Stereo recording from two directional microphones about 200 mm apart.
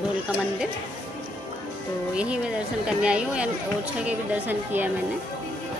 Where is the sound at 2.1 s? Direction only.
5° right (ahead or behind).